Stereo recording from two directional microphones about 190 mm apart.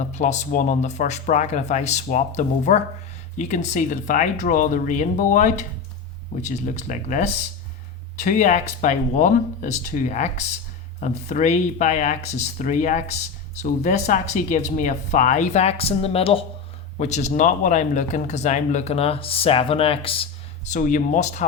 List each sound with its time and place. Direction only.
0.0 s speech: 40° left (ahead or behind)
20.7 s speech: 40° left (ahead or behind)